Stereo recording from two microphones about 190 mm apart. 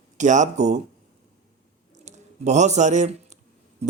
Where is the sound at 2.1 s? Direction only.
35° right (ahead or behind).